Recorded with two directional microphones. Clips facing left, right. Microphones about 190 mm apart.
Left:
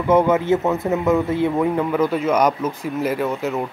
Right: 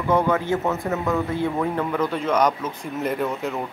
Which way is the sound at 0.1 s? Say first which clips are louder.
Left 5 dB; 20° left (ahead or behind).